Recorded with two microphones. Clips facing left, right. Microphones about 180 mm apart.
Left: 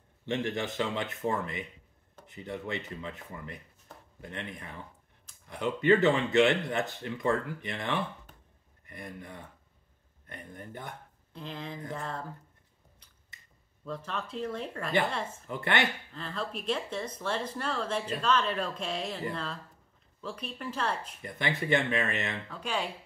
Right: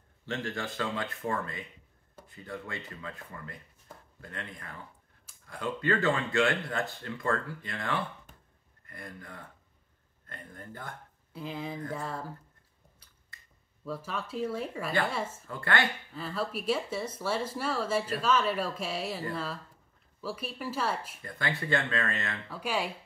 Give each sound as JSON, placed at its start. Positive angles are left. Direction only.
{"t": 0.2, "sound": "speech", "side_deg": 20}
{"t": 11.3, "sound": "speech", "side_deg": -5}
{"t": 13.3, "sound": "finger snapping", "side_deg": 20}
{"t": 13.8, "sound": "speech", "side_deg": -5}
{"t": 15.4, "sound": "speech", "side_deg": 20}
{"t": 16.1, "sound": "speech", "side_deg": -5}
{"t": 21.2, "sound": "speech", "side_deg": 20}
{"t": 22.5, "sound": "speech", "side_deg": -5}